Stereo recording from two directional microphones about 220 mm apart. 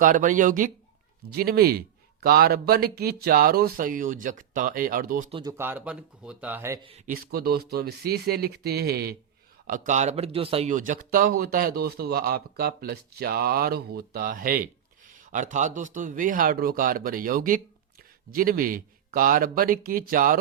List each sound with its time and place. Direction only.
0.0 s speech: 35° right (ahead or behind)
5.3 s speech: 20° right (ahead or behind)
7.3 s speech: 45° right (ahead or behind)
9.6 s speech: 35° right (ahead or behind)